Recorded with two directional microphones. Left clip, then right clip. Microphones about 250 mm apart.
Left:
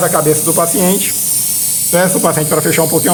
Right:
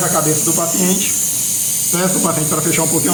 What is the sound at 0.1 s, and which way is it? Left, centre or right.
Speech, left.